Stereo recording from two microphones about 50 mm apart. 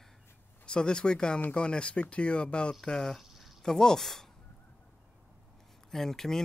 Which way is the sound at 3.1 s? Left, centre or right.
Centre.